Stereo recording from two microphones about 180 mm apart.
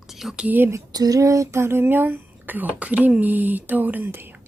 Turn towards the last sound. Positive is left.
turn(degrees=-10)  # may be behind; listen again after turning